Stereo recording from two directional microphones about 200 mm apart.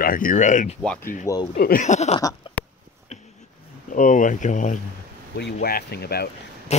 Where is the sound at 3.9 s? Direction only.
40° left (ahead or behind).